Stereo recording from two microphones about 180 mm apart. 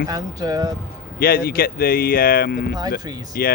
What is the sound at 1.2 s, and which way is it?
Speech, 55° left (ahead or behind).